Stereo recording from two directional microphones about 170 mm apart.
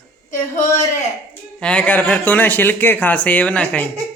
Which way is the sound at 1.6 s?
5° left (ahead or behind).